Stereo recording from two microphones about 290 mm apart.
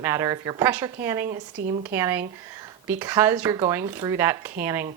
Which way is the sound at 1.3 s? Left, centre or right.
Right.